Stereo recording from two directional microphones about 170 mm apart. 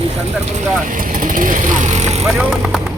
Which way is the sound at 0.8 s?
50° right (ahead or behind).